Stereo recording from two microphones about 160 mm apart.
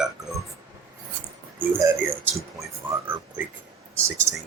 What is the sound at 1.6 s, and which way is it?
Speech, 15° right (ahead or behind).